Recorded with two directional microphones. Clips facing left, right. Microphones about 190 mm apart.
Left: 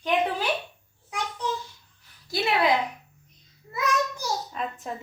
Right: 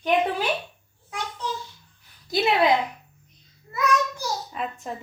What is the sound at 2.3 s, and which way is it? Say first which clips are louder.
Speech: right 4 dB; 20° right (ahead or behind).